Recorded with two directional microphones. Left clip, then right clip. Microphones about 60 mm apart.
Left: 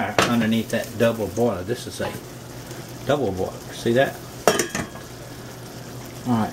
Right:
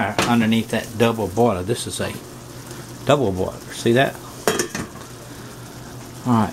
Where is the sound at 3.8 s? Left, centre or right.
Right.